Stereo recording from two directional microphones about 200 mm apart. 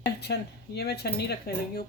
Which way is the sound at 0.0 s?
55° left (ahead or behind).